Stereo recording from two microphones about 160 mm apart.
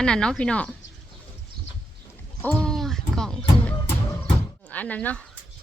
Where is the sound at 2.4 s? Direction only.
5° left (ahead or behind).